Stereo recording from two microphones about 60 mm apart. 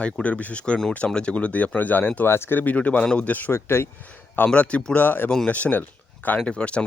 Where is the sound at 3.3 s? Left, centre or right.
Left.